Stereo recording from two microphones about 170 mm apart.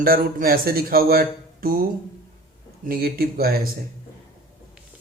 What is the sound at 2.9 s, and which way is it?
Speech, 60° right (ahead or behind).